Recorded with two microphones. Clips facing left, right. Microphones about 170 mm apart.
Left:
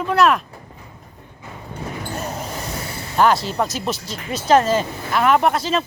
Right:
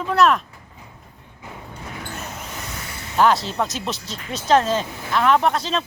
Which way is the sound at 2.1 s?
35° left (ahead or behind).